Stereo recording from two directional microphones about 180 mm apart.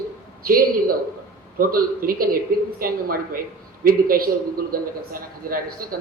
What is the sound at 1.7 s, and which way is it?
A man's voice, 55° right (ahead or behind).